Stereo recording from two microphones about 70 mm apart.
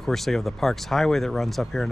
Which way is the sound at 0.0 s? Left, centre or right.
Centre.